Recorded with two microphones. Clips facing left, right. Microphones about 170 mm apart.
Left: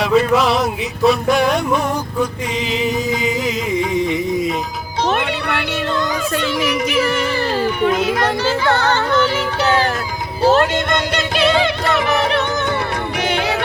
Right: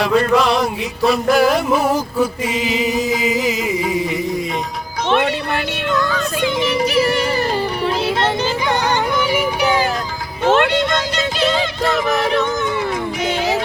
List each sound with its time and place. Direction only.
0.0 s a sound: centre (ahead or behind)
1.0 s music: centre (ahead or behind)
5.0 s music: 45° left (ahead or behind)
5.9 s music: 20° left (ahead or behind)
6.4 s music: 25° right (ahead or behind)
7.8 s music: 30° right (ahead or behind)
8.4 s music: 15° right (ahead or behind)
10.4 s music: 40° left (ahead or behind)
10.8 s music: 60° left (ahead or behind)